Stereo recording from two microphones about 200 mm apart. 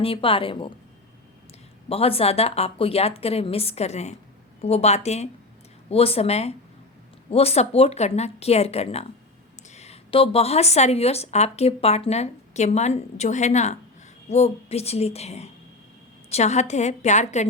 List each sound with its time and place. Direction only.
0.0 s a woman's voice: 25° left (ahead or behind)
1.9 s a woman's voice: 30° left (ahead or behind)